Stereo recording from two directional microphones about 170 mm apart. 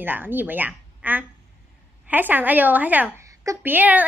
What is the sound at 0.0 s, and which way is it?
A woman's voice, 10° right (ahead or behind).